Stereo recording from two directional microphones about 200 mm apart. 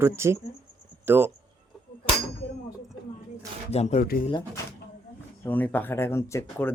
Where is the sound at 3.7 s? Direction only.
35° left (ahead or behind).